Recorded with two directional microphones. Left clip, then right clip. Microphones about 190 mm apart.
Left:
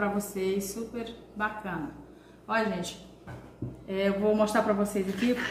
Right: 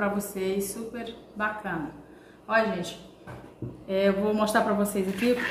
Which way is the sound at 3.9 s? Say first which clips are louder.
Right 2 dB; 25° right (ahead or behind).